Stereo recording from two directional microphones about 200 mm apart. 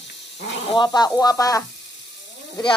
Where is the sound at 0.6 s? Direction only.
25° left (ahead or behind).